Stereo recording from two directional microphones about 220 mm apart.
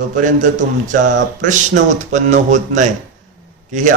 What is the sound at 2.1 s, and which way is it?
A man's voice, 35° right (ahead or behind).